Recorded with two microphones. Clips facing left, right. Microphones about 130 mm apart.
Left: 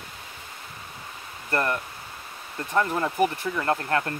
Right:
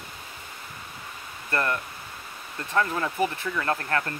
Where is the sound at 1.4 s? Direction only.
20° left (ahead or behind).